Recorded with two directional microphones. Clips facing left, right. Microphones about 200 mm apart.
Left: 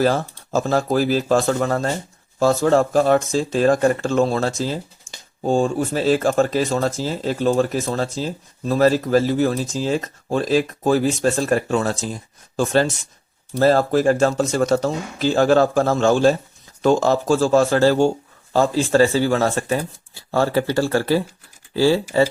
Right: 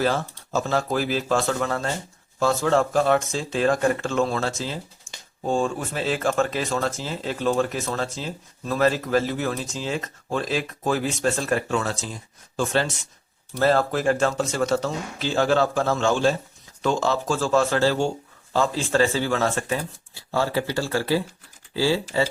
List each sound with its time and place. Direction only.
0.0 s speech: 40° left (ahead or behind)
20.3 s speech: 50° left (ahead or behind)